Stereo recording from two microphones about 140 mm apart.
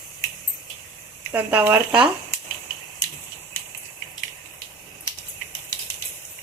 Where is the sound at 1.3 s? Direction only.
15° right (ahead or behind).